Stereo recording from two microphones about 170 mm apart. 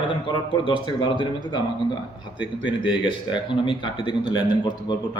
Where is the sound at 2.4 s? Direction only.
25° left (ahead or behind).